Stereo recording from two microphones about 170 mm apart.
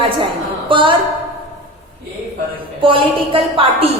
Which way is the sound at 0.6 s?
30° right (ahead or behind).